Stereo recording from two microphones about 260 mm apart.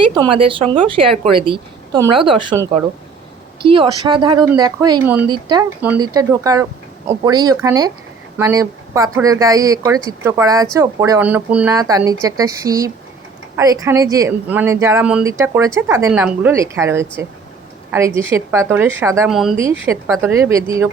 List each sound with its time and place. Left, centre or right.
0.0 s a woman's voice: centre